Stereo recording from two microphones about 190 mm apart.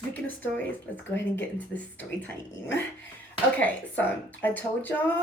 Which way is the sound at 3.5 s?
10° left (ahead or behind).